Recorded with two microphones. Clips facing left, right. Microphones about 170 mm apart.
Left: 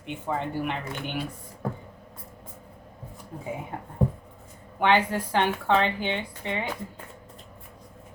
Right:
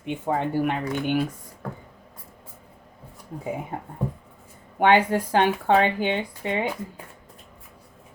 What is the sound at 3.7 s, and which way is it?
Speech, 40° right (ahead or behind).